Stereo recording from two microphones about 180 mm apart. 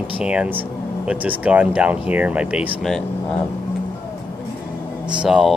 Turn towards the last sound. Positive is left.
turn(degrees=-5)  # may be behind; listen again after turning